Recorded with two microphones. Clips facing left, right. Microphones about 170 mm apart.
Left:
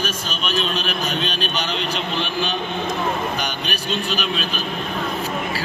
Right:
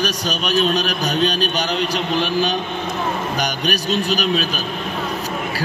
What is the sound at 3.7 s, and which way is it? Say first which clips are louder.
Speech: right 7 dB; 40° right (ahead or behind).